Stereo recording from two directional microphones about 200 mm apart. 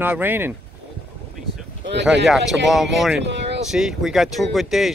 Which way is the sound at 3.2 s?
60° right (ahead or behind).